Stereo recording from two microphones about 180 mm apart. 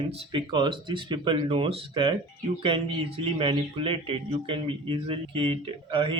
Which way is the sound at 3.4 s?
30° right (ahead or behind).